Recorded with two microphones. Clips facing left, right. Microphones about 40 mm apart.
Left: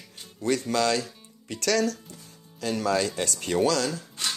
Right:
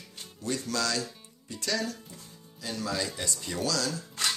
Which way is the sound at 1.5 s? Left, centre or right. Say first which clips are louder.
Left 7 dB; left.